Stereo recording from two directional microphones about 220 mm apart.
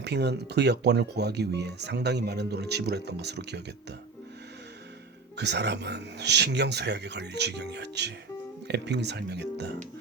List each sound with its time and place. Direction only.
0.0 s speech: 50° right (ahead or behind)
5.4 s speech: 50° right (ahead or behind)